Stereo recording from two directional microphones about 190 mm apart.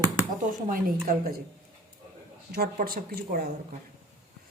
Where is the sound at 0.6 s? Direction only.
50° right (ahead or behind).